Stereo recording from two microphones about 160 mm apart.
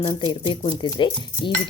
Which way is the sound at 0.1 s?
30° left (ahead or behind).